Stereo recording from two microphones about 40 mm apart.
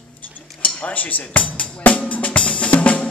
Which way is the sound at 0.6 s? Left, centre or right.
Left.